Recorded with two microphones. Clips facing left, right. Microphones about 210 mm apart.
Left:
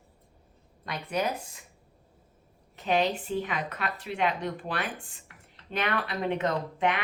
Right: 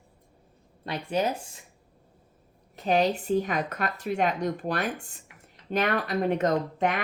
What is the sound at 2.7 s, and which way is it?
A woman's voice, 40° right (ahead or behind).